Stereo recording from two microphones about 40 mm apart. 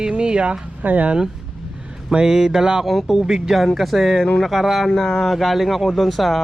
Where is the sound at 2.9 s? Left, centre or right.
Centre.